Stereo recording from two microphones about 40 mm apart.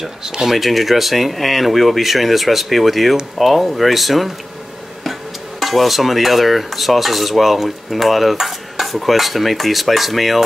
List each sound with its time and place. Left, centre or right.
0.2 s speech: centre
0.5 s dishes: centre
5.6 s dishes: centre